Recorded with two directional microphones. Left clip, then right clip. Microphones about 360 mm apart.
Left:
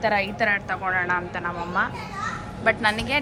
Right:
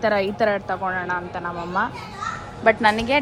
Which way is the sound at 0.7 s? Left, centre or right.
Centre.